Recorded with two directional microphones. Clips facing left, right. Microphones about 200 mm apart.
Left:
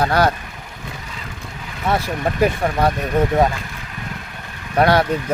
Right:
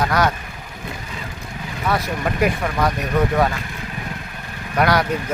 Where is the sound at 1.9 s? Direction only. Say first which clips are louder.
Left 2 dB; 30° left (ahead or behind).